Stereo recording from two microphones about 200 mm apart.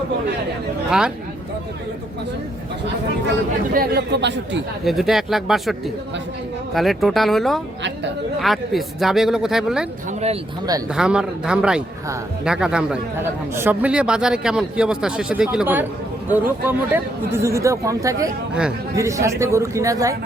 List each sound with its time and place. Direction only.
0.9 s a man's voice: 5° right (ahead or behind)
3.8 s speech: 55° right (ahead or behind)
4.9 s a man's voice: centre (ahead or behind)
6.7 s a man's voice: centre (ahead or behind)
10.9 s a man's voice: 5° right (ahead or behind)